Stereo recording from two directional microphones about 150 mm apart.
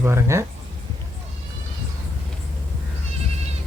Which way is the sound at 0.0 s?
15° right (ahead or behind).